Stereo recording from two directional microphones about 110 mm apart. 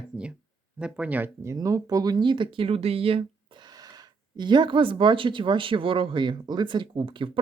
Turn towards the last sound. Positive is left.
turn(degrees=-50)  # may be behind; listen again after turning